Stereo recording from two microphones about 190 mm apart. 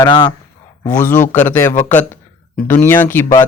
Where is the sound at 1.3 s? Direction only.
10° left (ahead or behind).